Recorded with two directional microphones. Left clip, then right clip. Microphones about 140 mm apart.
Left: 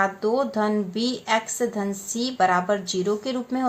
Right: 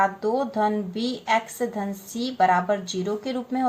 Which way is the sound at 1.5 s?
35° left (ahead or behind).